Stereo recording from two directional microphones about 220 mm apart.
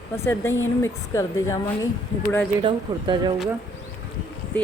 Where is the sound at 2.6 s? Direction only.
20° right (ahead or behind).